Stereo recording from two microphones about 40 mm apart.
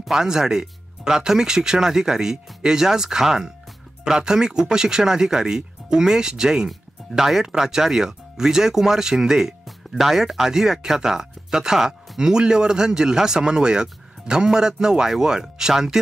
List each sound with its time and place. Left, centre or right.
0.1 s speech: centre
7.1 s speech: centre
9.7 s speech: centre